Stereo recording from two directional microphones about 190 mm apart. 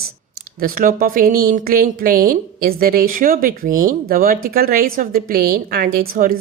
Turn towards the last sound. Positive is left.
turn(degrees=-50)  # may be behind; listen again after turning